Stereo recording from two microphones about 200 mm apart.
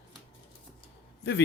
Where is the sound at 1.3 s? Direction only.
55° left (ahead or behind).